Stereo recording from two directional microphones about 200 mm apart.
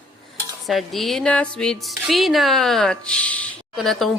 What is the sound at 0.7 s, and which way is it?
Speech, centre (ahead or behind).